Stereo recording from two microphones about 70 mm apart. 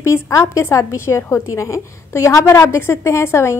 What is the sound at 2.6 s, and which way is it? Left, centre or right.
Speech, left.